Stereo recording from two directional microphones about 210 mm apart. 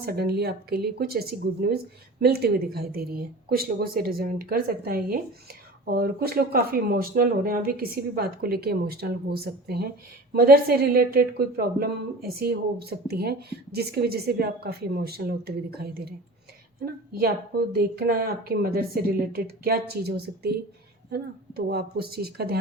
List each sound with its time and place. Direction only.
0.0 s a woman's voice: 45° right (ahead or behind)